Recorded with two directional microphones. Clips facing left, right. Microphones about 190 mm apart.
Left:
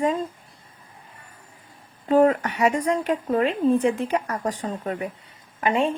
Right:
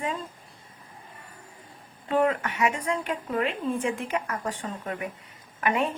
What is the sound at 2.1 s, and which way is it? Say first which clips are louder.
Speech: left 6 dB; 40° left (ahead or behind).